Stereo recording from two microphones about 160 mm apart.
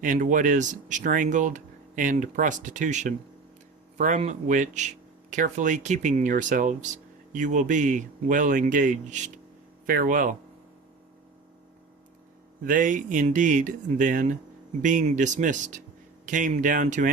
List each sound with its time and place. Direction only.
0.0 s speech: 55° right (ahead or behind)
9.8 s speech: 65° right (ahead or behind)
12.6 s speech: 55° right (ahead or behind)